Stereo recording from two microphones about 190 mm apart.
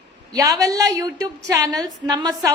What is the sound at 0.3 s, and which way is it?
A woman's voice, 20° right (ahead or behind).